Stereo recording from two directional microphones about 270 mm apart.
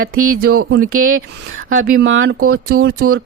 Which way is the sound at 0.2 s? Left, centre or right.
Right.